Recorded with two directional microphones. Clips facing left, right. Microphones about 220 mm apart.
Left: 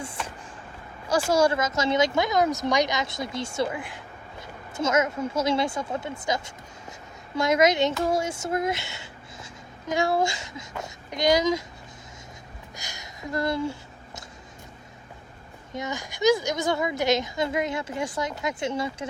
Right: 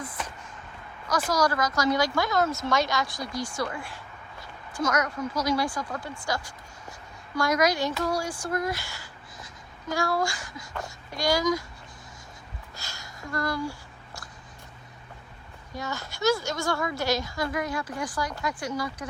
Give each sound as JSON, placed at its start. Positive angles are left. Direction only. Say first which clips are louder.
{"t": 1.0, "sound": "speech", "louder": "left 4 dB", "side_deg": 30}
{"t": 12.7, "sound": "a sound", "louder": "left 2 dB", "side_deg": 15}
{"t": 15.7, "sound": "speech", "louder": "left 3 dB", "side_deg": 20}